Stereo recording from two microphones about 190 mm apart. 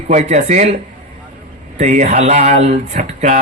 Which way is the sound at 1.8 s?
35° right (ahead or behind).